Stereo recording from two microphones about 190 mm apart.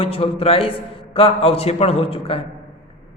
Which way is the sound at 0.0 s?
30° left (ahead or behind).